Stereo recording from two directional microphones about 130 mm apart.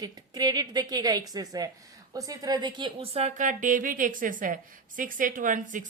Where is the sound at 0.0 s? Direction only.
30° right (ahead or behind).